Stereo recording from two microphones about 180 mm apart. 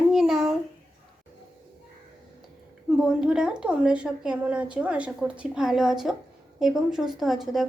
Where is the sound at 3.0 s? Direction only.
5° right (ahead or behind).